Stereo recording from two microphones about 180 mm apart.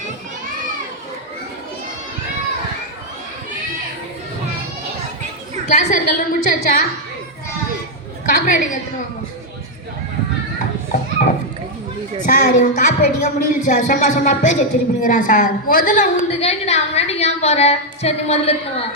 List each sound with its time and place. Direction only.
5.6 s a woman's voice: 45° left (ahead or behind)
8.3 s a woman's voice: 50° left (ahead or behind)
12.2 s a woman's voice: 45° left (ahead or behind)